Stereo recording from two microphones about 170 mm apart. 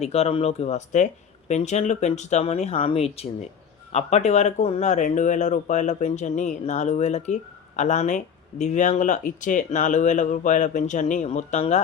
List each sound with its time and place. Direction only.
0.0 s speech: 40° left (ahead or behind)